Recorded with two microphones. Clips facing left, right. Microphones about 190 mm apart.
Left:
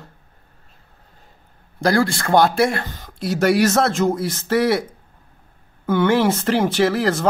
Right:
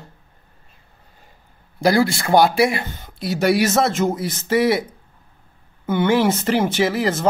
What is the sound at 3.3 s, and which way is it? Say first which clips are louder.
Speech: left 1 dB; centre (ahead or behind).